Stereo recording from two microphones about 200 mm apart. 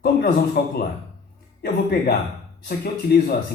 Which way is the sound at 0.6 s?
55° left (ahead or behind).